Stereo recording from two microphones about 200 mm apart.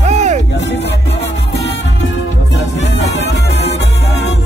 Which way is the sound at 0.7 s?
60° left (ahead or behind).